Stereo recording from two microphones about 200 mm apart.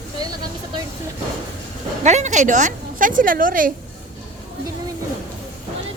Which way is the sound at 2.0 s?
35° right (ahead or behind).